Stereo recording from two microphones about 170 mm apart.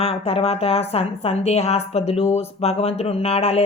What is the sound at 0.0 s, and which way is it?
A woman's voice, 35° left (ahead or behind).